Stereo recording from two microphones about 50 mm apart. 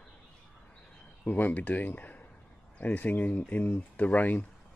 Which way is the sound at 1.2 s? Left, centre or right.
Left.